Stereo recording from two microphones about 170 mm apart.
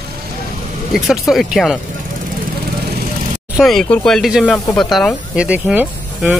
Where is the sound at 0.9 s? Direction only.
Centre (ahead or behind).